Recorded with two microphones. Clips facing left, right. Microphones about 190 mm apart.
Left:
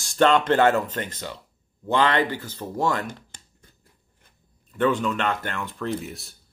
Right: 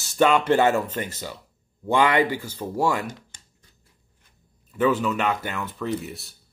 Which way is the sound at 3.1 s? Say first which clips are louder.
Even; 60° left (ahead or behind).